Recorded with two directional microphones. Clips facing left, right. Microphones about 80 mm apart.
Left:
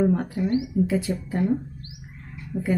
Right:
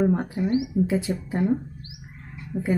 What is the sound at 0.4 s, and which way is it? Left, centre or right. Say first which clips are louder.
Speech: even; centre.